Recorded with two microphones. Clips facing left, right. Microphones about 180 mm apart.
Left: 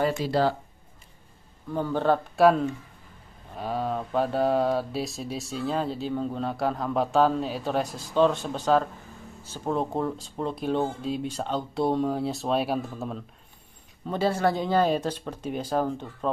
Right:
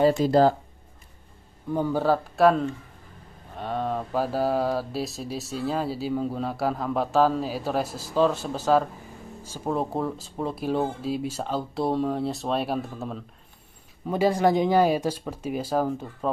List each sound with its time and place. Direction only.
0.2 s speech: 45° right (ahead or behind)
1.7 s speech: 10° right (ahead or behind)
14.0 s speech: 10° right (ahead or behind)